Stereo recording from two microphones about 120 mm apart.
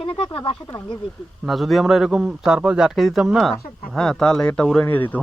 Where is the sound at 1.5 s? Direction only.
Centre (ahead or behind).